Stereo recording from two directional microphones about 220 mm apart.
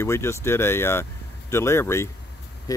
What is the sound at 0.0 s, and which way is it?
Speech, 10° left (ahead or behind).